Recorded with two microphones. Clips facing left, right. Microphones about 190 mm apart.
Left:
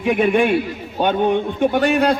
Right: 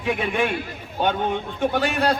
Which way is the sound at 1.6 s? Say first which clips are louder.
Left 5 dB; 15° left (ahead or behind).